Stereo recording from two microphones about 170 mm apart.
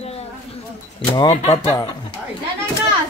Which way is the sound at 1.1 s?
25° left (ahead or behind).